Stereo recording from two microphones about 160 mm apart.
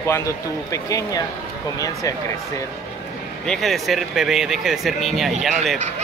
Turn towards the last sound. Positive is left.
turn(degrees=0)  # may be behind; listen again after turning